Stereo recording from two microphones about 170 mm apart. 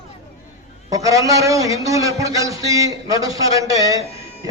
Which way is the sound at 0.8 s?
20° right (ahead or behind).